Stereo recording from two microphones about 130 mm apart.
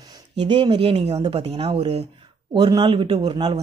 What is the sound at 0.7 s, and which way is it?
Speech, 45° right (ahead or behind).